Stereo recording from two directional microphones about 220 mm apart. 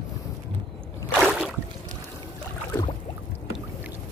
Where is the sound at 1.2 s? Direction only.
Centre (ahead or behind).